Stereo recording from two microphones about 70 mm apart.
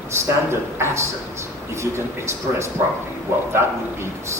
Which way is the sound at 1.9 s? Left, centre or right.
Right.